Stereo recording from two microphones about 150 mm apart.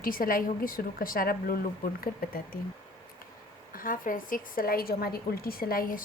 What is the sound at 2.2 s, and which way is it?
Speech, 90° left.